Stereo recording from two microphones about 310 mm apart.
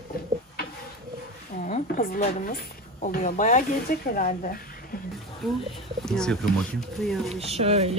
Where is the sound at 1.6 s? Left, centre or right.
Left.